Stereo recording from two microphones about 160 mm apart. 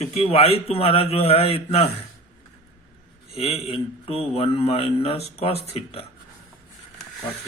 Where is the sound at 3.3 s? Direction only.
40° left (ahead or behind).